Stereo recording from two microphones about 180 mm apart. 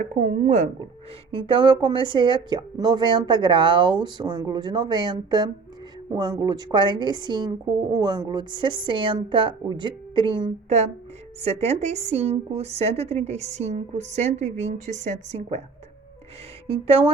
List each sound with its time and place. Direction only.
0.0 s a woman's voice: 40° right (ahead or behind)
16.6 s a woman's voice: 30° right (ahead or behind)